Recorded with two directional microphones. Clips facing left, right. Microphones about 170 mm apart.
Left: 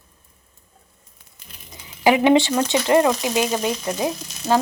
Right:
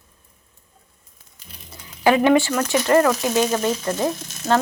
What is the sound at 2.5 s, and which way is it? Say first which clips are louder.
Speech: even; 20° left (ahead or behind).